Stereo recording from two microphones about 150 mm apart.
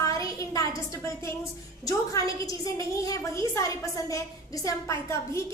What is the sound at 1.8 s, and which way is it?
A woman's voice, 25° left (ahead or behind).